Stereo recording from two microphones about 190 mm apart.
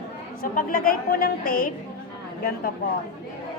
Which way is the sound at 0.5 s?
50° left (ahead or behind).